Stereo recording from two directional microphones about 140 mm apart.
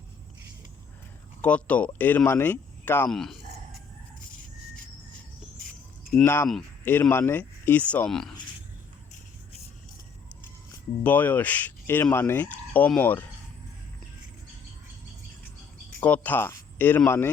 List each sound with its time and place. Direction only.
1.4 s speech: 10° left (ahead or behind)
3.1 s speech: 5° left (ahead or behind)
6.1 s speech: 15° left (ahead or behind)
11.0 s speech: 10° left (ahead or behind)
16.0 s speech: 10° left (ahead or behind)